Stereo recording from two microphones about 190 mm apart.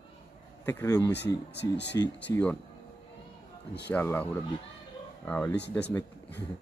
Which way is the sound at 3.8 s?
10° left (ahead or behind).